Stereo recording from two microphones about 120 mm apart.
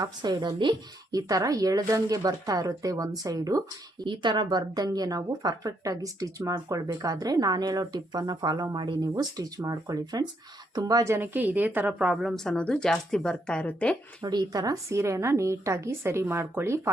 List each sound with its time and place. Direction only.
0.0 s a woman's voice: 35° right (ahead or behind)
4.0 s a woman's voice: 40° right (ahead or behind); by 13.9 s 10° left (ahead or behind)
14.2 s a woman's voice: 35° right (ahead or behind)